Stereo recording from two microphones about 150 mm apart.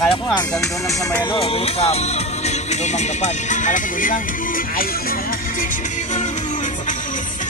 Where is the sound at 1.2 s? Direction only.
35° left (ahead or behind); by 5.1 s 70° left (ahead or behind).